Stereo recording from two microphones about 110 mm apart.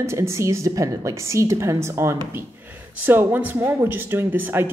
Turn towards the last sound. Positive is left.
turn(degrees=-20)  # may be behind; listen again after turning